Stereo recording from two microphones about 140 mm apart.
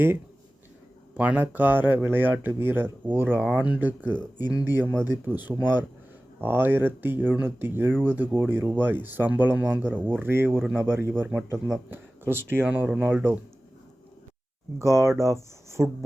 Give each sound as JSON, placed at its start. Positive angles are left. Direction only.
{"t": 1.1, "sound": "speech", "side_deg": -10}
{"t": 10.6, "sound": "speech", "side_deg": 5}
{"t": 11.7, "sound": "speech", "side_deg": -15}
{"t": 14.8, "sound": "speech", "side_deg": -20}